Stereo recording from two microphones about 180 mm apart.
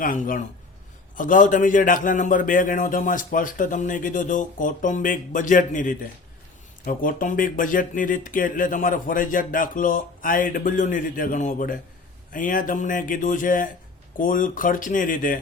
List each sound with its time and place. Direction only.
0.0 s a man's voice: 50° left (ahead or behind)